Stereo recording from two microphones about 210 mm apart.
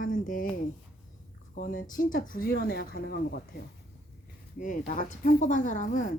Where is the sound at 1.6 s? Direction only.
40° left (ahead or behind).